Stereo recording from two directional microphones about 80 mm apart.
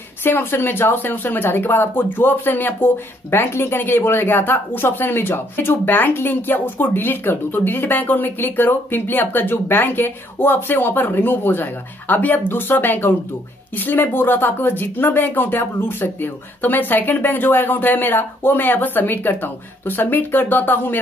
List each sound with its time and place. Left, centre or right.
0.2 s speech: left